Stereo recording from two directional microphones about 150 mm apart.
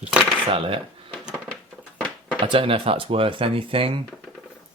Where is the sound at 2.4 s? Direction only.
35° right (ahead or behind).